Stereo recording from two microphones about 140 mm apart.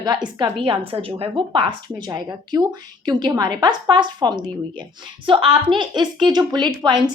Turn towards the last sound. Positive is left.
turn(degrees=-30)  # may be behind; listen again after turning